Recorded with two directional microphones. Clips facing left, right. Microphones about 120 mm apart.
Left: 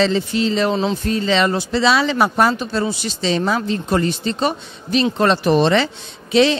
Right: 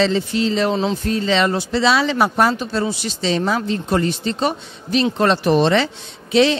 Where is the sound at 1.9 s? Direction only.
20° left (ahead or behind).